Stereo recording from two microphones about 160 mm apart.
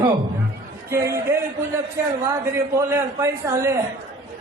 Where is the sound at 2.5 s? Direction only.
15° right (ahead or behind).